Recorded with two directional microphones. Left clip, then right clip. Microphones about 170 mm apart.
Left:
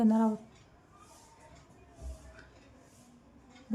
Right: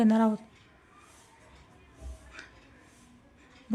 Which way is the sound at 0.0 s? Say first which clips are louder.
Right 3 dB; 15° right (ahead or behind).